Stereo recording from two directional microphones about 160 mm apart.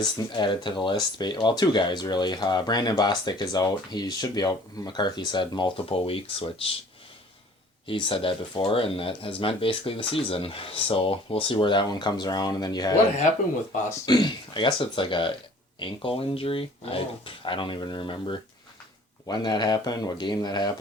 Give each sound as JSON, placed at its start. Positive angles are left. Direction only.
{"t": 0.0, "sound": "speech", "side_deg": 30}
{"t": 7.9, "sound": "speech", "side_deg": 30}
{"t": 14.0, "sound": "speech", "side_deg": 25}